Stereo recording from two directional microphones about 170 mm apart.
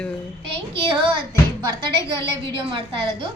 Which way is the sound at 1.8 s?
30° right (ahead or behind).